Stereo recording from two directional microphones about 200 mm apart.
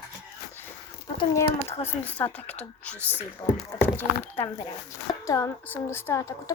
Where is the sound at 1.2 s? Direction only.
15° left (ahead or behind).